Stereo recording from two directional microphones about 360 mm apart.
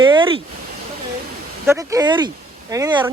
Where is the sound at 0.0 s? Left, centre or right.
Centre.